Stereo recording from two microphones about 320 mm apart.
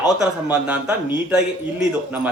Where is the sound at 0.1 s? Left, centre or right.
Centre.